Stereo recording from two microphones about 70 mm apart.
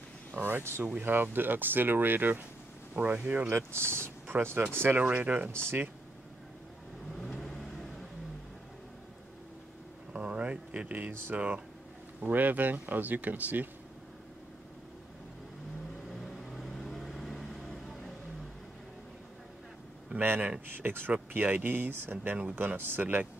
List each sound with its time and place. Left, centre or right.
0.3 s speech: right
7.2 s vehicle: centre
10.1 s a sound: centre
12.2 s speech: right
16.2 s vehicle: centre
20.2 s speech: right